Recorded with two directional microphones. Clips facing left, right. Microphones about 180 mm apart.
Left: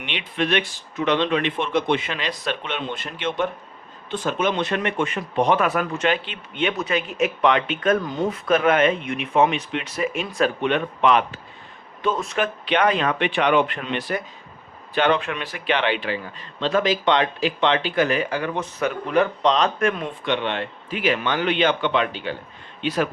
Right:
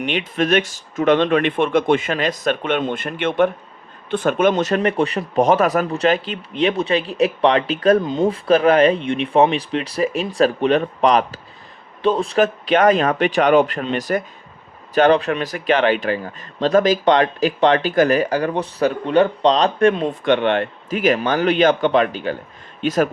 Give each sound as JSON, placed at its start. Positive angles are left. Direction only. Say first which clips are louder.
{"t": 0.0, "sound": "speech", "louder": "right 6 dB", "side_deg": -45}
{"t": 20.2, "sound": "speech", "louder": "right 7 dB", "side_deg": -55}